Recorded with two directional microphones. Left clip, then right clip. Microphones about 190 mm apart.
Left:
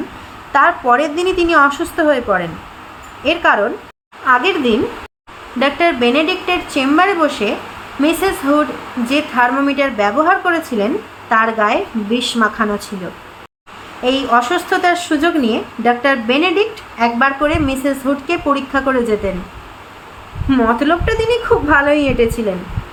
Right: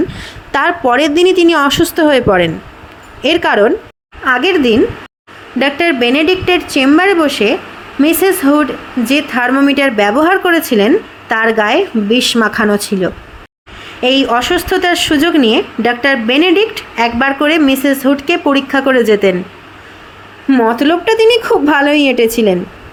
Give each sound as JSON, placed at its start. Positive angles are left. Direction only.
{"t": 0.5, "sound": "a woman's voice", "side_deg": -45}
{"t": 4.3, "sound": "a woman's voice", "side_deg": -25}
{"t": 14.0, "sound": "a woman's voice", "side_deg": -35}
{"t": 20.5, "sound": "a woman's voice", "side_deg": -30}